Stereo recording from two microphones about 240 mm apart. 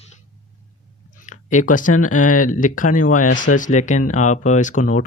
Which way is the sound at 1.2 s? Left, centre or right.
Left.